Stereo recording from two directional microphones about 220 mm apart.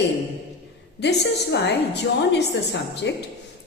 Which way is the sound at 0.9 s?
50° left (ahead or behind).